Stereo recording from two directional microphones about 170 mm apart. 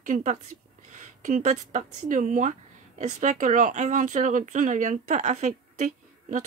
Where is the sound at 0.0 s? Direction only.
45° right (ahead or behind).